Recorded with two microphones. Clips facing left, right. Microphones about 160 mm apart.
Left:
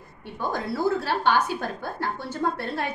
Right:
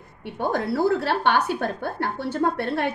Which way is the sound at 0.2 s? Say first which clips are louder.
Right 4 dB; 65° right (ahead or behind).